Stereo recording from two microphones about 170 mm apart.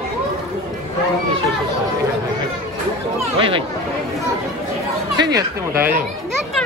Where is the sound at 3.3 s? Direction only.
30° right (ahead or behind).